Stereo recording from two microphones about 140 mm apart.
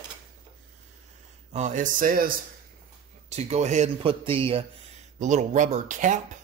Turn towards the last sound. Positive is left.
turn(degrees=-65)  # may be behind; listen again after turning